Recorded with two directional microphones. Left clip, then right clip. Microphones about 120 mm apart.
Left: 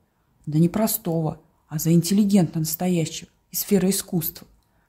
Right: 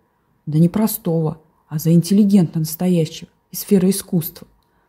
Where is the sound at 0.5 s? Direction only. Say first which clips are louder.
Right 3 dB; 25° right (ahead or behind).